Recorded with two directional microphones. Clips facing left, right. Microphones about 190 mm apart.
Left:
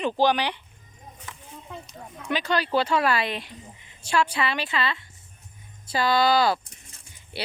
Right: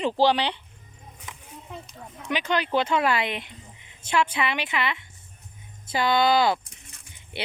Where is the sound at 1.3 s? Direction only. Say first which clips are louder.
Right 1 dB; 15° right (ahead or behind).